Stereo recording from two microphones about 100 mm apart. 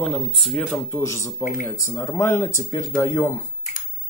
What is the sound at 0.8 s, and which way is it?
Speech, 25° left (ahead or behind).